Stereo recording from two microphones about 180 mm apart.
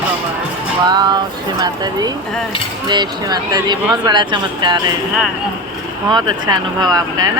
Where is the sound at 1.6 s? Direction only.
20° right (ahead or behind).